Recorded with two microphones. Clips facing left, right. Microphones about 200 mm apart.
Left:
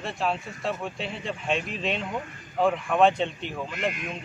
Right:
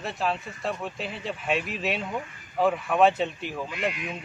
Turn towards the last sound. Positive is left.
turn(degrees=0)  # may be behind; listen again after turning